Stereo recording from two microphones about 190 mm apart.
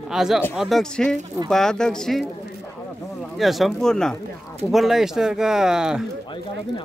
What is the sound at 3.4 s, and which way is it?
Speech, centre (ahead or behind).